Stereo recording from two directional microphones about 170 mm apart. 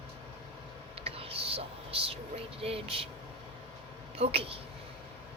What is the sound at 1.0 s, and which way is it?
Whispering, 35° right (ahead or behind).